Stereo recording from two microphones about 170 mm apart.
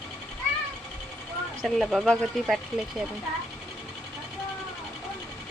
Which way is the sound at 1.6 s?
Centre (ahead or behind).